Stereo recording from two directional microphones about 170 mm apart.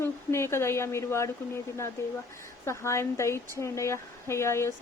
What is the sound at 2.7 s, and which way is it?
A woman's voice, 15° left (ahead or behind).